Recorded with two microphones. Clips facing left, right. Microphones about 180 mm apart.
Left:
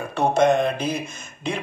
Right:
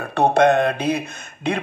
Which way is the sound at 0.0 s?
60° right (ahead or behind).